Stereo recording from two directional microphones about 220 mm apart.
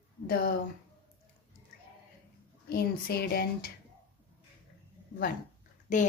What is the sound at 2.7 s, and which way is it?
Speech, 45° left (ahead or behind).